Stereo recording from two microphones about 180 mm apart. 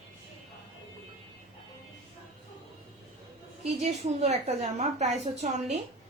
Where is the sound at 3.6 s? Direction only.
40° right (ahead or behind).